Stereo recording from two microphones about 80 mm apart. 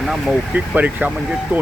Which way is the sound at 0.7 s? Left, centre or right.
Right.